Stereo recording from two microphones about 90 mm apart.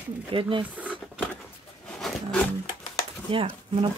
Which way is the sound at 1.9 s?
5° left (ahead or behind).